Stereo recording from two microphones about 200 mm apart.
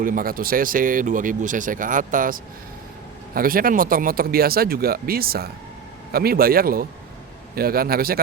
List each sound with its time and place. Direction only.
0.0 s speech: 45° right (ahead or behind)